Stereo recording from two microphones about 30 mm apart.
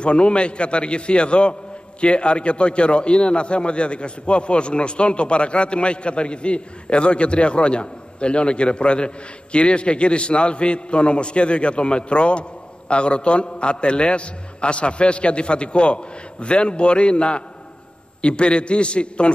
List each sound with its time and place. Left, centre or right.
0.0 s a man's voice: left